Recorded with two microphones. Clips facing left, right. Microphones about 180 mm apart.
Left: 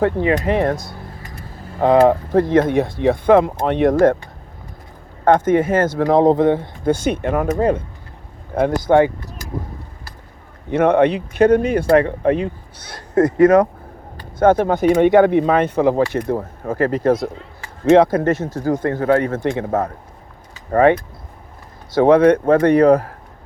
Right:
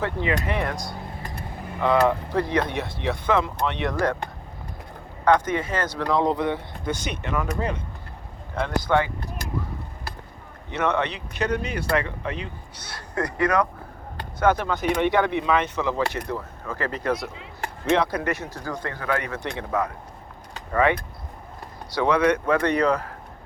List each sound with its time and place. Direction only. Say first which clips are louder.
0.0 s speech: left 9 dB; 45° left (ahead or behind)
1.8 s speech: left 8 dB; 45° left (ahead or behind)
5.2 s speech: left 7 dB; 50° left (ahead or behind)
8.9 s speech: left 9 dB; 40° left (ahead or behind)
10.7 s speech: left 11 dB; 55° left (ahead or behind)
13.4 s speech: left 10 dB; 25° left (ahead or behind)
14.3 s speech: left 8 dB; 50° left (ahead or behind)
18.3 s speech: left 9 dB; 25° left (ahead or behind)
18.5 s speech: left 12 dB; 50° left (ahead or behind)
18.9 s speech: left 10 dB; 30° left (ahead or behind)
19.5 s speech: left 6 dB; 45° left (ahead or behind)
21.9 s speech: left 9 dB; 50° left (ahead or behind)